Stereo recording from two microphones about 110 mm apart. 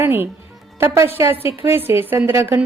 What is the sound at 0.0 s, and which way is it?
A woman's voice, 20° right (ahead or behind).